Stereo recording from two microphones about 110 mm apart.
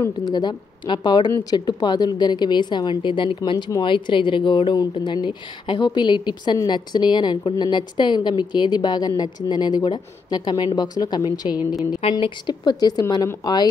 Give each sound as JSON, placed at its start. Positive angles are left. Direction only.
{"t": 0.3, "sound": "a woman's voice", "side_deg": 45}
{"t": 12.0, "sound": "a woman's voice", "side_deg": 55}